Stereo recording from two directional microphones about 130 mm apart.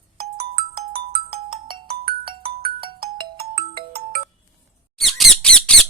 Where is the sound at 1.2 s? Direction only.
40° right (ahead or behind).